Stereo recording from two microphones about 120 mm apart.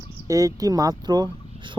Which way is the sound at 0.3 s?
30° right (ahead or behind).